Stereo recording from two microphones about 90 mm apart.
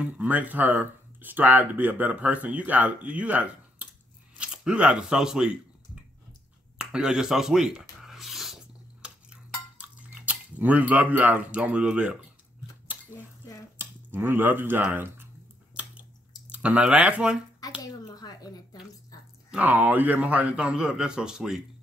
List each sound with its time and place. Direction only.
0.0 s speech: 15° right (ahead or behind)
6.8 s speech: 10° right (ahead or behind)
8.0 s dishes: 5° right (ahead or behind)
13.7 s speech: 20° right (ahead or behind)
15.7 s squish: 15° right (ahead or behind)
16.4 s speech: 15° right (ahead or behind)
17.8 s a sound: 45° left (ahead or behind)
19.5 s speech: 20° right (ahead or behind)